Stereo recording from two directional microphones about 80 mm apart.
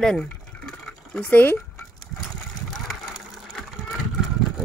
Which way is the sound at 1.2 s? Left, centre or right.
Left.